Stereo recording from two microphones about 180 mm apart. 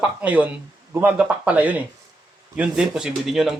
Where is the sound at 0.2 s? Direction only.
10° right (ahead or behind).